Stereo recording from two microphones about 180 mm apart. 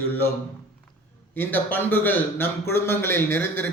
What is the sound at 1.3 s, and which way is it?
A man's voice, 10° left (ahead or behind).